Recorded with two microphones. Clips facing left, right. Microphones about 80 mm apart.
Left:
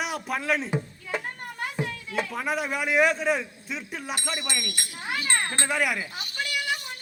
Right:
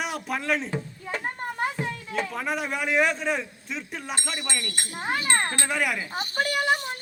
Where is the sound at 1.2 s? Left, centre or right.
Right.